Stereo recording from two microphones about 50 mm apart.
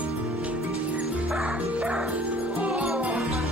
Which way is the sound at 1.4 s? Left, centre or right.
Right.